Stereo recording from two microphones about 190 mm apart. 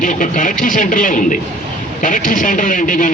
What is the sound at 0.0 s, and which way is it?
A man's voice, 40° left (ahead or behind).